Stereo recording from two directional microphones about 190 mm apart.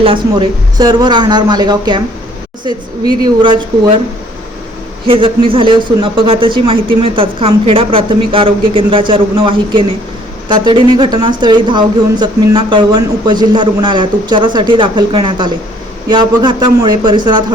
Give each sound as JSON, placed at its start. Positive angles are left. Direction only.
{"t": 0.0, "sound": "speech", "side_deg": -25}
{"t": 5.0, "sound": "speech", "side_deg": -25}